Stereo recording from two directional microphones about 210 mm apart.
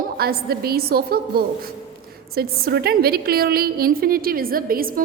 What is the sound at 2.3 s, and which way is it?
A woman's voice, 45° right (ahead or behind).